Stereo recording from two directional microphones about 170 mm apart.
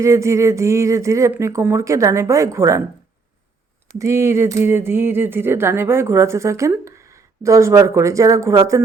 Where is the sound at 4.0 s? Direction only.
15° right (ahead or behind).